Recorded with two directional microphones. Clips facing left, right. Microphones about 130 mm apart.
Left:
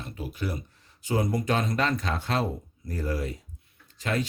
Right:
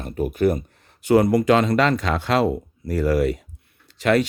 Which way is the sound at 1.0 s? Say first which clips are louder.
Right 11 dB; 75° right (ahead or behind).